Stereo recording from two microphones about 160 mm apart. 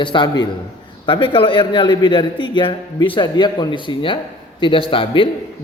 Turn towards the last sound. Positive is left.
turn(degrees=35)  # may be behind; listen again after turning